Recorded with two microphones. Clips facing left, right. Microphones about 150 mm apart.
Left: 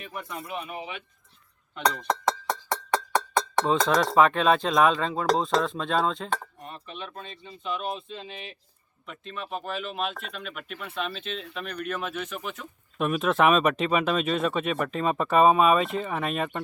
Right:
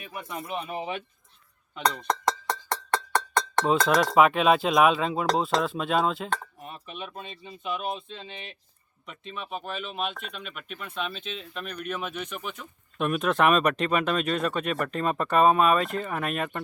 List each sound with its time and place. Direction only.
0.0 s speech: 15° right (ahead or behind); by 1.0 s 40° right (ahead or behind)
1.9 s cowbell: 5° left (ahead or behind)
3.8 s speech: 10° right (ahead or behind)